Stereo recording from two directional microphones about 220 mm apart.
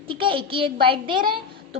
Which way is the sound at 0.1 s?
25° right (ahead or behind).